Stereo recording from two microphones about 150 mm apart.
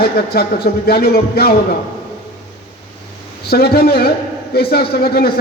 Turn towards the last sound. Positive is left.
turn(degrees=90)